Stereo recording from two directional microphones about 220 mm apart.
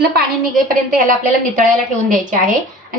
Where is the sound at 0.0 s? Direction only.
45° right (ahead or behind).